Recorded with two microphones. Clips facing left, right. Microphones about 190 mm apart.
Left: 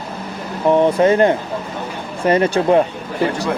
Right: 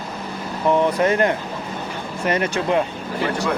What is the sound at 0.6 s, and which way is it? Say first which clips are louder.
Speech: left 5 dB; 30° left (ahead or behind).